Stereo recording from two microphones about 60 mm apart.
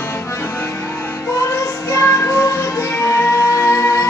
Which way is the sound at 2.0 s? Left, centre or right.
Left.